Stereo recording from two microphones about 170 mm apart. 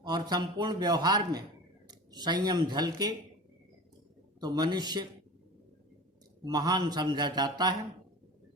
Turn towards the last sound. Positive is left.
turn(degrees=-25)  # may be behind; listen again after turning